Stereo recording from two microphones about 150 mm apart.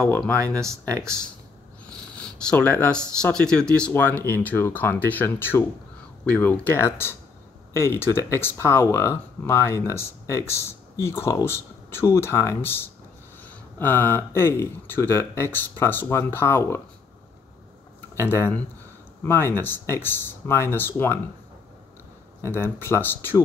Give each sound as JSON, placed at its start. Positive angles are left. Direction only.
{"t": 0.4, "sound": "speech", "side_deg": -20}
{"t": 1.9, "sound": "speech", "side_deg": 5}
{"t": 18.1, "sound": "speech", "side_deg": 15}
{"t": 22.4, "sound": "speech", "side_deg": 15}